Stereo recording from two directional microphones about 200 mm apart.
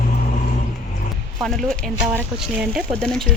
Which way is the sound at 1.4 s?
Centre (ahead or behind).